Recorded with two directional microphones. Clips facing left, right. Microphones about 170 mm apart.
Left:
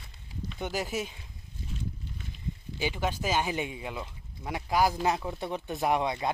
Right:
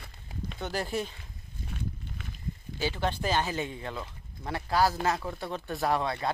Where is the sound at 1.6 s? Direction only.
60° right (ahead or behind).